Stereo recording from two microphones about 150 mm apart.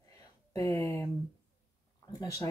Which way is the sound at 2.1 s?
25° left (ahead or behind).